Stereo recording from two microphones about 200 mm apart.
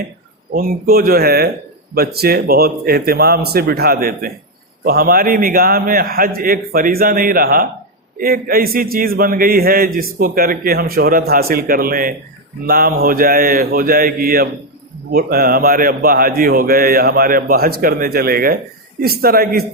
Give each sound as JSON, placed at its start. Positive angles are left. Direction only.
{"t": 0.5, "sound": "speech", "side_deg": -45}